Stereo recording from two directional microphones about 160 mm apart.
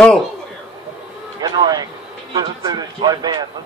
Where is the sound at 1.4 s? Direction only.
25° right (ahead or behind).